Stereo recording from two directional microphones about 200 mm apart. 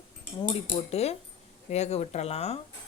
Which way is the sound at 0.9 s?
30° left (ahead or behind).